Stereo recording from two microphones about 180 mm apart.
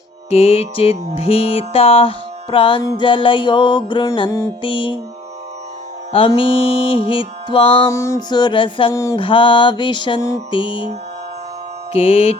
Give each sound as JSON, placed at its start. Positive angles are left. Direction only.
{"t": 0.3, "sound": "music", "side_deg": 35}
{"t": 6.1, "sound": "music", "side_deg": 30}
{"t": 7.9, "sound": "music", "side_deg": 15}
{"t": 11.9, "sound": "music", "side_deg": 35}